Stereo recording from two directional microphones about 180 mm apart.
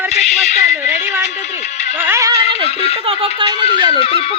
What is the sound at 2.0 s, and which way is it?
Speech, 15° right (ahead or behind).